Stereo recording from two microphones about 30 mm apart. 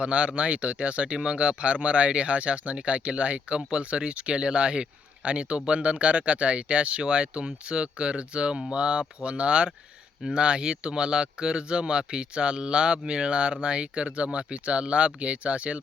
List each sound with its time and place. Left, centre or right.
0.0 s speech: right